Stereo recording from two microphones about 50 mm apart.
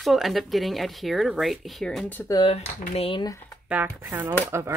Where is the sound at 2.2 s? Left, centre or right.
Left.